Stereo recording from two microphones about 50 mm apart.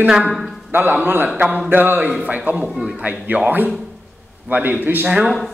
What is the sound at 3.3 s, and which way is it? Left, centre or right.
Speech, right.